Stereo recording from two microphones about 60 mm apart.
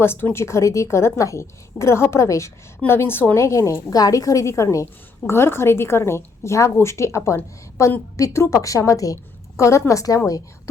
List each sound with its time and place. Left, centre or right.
0.0 s a woman's voice: left
2.8 s a woman's voice: left
3.3 s a woman's voice: left
9.6 s a woman's voice: left